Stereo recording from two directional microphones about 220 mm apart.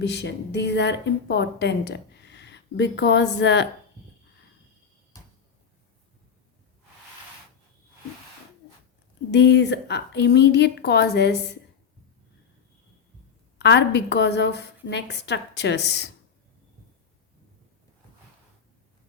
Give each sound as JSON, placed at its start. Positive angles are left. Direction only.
{"t": 0.0, "sound": "speech", "side_deg": 50}
{"t": 9.3, "sound": "speech", "side_deg": 50}
{"t": 13.6, "sound": "speech", "side_deg": 55}